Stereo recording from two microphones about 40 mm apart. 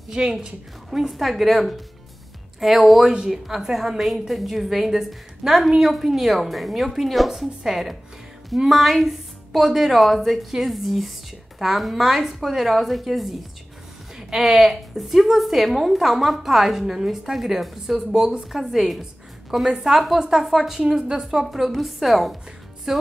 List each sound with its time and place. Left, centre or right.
0.1 s speech: centre
0.8 s a woman's voice: centre
19.5 s speech: centre
19.9 s a woman's voice: centre
21.5 s a woman's voice: centre